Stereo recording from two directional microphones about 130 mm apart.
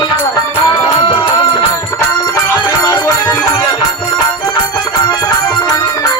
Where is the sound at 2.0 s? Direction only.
25° left (ahead or behind).